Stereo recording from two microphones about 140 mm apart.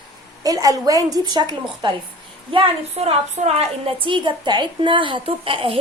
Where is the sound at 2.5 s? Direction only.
45° right (ahead or behind).